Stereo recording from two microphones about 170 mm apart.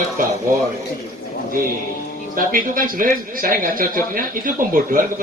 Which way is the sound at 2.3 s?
55° right (ahead or behind).